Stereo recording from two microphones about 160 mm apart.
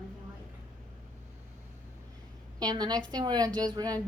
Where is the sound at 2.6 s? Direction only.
25° right (ahead or behind).